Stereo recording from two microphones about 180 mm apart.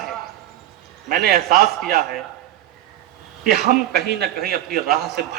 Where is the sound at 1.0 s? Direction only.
55° right (ahead or behind).